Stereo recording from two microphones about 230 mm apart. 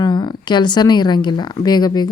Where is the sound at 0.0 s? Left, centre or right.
Centre.